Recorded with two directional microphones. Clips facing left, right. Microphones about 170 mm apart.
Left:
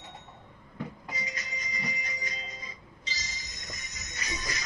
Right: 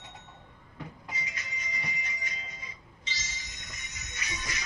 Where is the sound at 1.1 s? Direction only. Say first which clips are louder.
Left 2 dB; 40° left (ahead or behind).